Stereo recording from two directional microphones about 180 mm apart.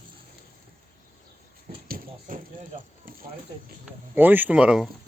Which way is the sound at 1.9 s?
50° right (ahead or behind).